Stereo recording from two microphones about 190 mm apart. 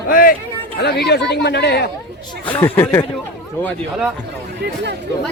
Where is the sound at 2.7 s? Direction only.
10° left (ahead or behind).